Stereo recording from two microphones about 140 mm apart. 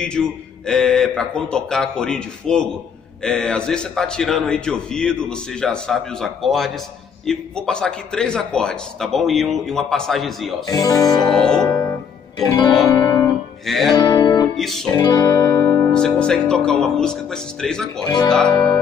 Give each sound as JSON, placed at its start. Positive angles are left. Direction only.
{"t": 0.2, "sound": "a man's voice", "side_deg": 0}
{"t": 10.7, "sound": "speech", "side_deg": 25}
{"t": 11.1, "sound": "a man's voice", "side_deg": 5}
{"t": 12.8, "sound": "music", "side_deg": 20}
{"t": 13.7, "sound": "a man's voice", "side_deg": 0}
{"t": 13.9, "sound": "music", "side_deg": 30}
{"t": 14.6, "sound": "music", "side_deg": 0}
{"t": 15.0, "sound": "music", "side_deg": 25}
{"t": 15.9, "sound": "a man's voice", "side_deg": 5}